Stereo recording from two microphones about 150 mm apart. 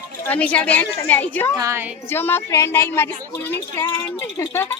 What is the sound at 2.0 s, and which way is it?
Speech, 15° left (ahead or behind).